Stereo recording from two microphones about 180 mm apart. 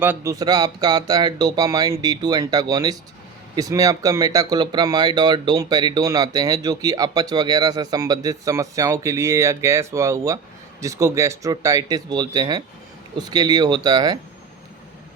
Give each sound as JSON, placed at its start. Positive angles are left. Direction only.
{"t": 0.0, "sound": "speech", "side_deg": -15}